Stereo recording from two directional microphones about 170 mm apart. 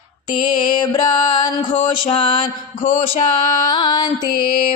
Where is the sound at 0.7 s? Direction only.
25° left (ahead or behind).